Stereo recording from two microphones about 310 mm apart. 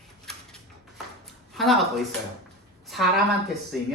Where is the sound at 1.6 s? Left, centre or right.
Centre.